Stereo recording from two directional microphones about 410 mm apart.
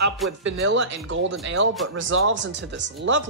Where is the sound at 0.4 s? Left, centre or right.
Right.